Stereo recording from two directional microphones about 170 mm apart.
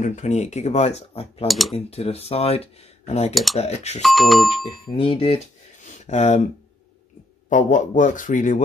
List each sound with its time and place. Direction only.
0.0 s speech: 45° left (ahead or behind)
1.5 s speech: centre (ahead or behind)
1.9 s speech: 35° left (ahead or behind)
4.0 s speech: centre (ahead or behind)
4.9 s speech: 30° left (ahead or behind)
7.4 s a man's voice: 50° left (ahead or behind)